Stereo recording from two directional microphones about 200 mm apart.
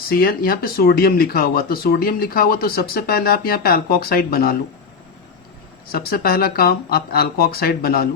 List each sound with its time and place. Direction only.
0.1 s speech: 45° left (ahead or behind)
5.9 s speech: 50° left (ahead or behind)